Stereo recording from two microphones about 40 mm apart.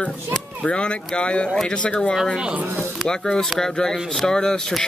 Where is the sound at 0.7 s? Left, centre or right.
Left.